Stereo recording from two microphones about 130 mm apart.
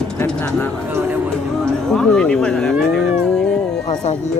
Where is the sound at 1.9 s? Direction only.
5° left (ahead or behind).